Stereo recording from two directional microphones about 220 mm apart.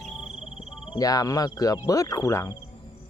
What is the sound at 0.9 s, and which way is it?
Speech, 15° left (ahead or behind).